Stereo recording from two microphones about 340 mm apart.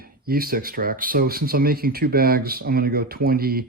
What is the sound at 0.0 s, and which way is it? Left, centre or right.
Speech, right.